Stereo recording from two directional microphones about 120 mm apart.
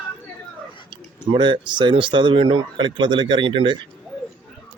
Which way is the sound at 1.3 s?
40° right (ahead or behind).